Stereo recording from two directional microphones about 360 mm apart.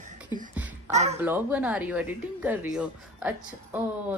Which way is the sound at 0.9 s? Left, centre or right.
Centre.